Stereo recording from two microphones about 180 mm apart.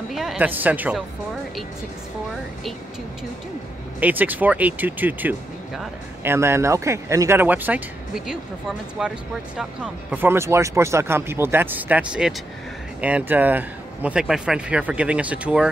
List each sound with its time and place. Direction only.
0.1 s speech: centre (ahead or behind)
4.0 s speech: 10° right (ahead or behind)